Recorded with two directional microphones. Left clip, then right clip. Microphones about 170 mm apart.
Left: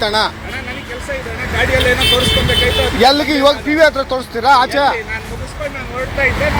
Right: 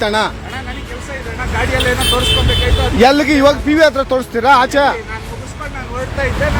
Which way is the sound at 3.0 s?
50° right (ahead or behind).